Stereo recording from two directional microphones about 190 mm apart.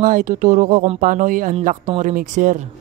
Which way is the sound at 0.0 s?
45° right (ahead or behind).